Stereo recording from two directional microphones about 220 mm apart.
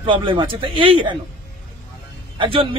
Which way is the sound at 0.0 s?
25° right (ahead or behind).